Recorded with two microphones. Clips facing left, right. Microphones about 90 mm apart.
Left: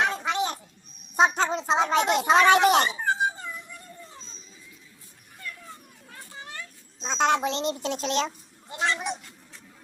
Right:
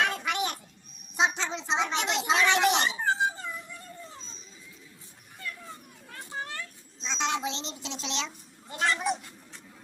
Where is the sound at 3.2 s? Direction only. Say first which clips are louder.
Left 2 dB; 20° left (ahead or behind).